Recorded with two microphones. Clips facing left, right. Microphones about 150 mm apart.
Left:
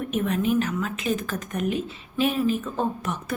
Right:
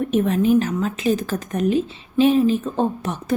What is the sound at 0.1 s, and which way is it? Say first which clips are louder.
A woman's voice: right 6 dB; 35° right (ahead or behind).